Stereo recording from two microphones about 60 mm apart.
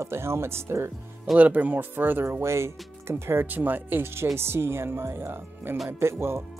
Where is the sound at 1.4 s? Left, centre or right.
Right.